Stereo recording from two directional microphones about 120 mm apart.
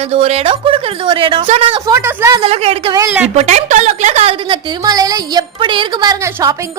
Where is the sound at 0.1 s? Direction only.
60° right (ahead or behind).